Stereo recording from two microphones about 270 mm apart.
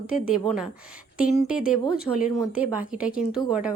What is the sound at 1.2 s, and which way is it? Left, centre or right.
Speech, left.